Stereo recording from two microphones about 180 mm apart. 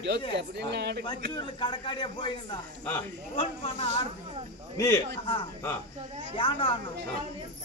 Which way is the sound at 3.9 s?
40° right (ahead or behind).